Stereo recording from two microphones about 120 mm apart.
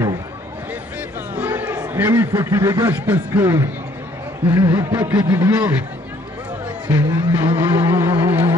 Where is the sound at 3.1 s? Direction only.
15° right (ahead or behind).